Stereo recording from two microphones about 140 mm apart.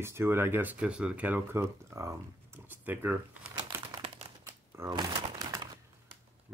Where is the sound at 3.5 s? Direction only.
40° right (ahead or behind).